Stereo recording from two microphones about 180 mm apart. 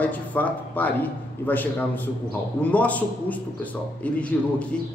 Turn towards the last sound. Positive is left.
turn(degrees=5)  # may be behind; listen again after turning